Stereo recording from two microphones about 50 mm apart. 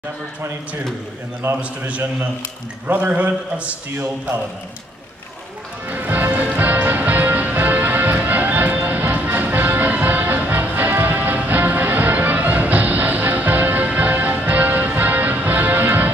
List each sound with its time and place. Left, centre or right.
1.6 s a man's voice: right
5.9 s music: right